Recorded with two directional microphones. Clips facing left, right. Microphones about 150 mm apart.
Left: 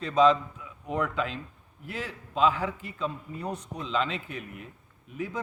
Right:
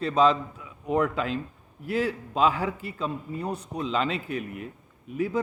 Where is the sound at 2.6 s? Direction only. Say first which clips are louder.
Right 2 dB; 5° right (ahead or behind).